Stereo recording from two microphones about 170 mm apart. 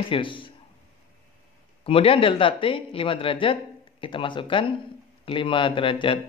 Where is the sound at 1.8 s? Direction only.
35° left (ahead or behind).